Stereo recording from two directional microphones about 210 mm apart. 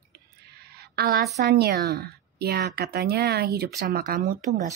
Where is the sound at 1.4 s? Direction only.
50° right (ahead or behind).